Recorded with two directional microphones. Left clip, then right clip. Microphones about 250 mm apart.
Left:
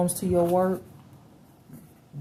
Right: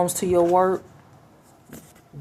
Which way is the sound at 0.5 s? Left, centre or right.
Right.